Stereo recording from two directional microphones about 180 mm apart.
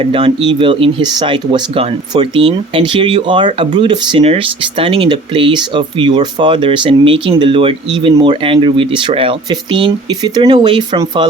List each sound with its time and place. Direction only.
0.0 s speech: 30° right (ahead or behind)